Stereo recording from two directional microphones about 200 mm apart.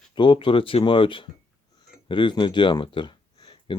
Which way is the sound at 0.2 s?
25° left (ahead or behind).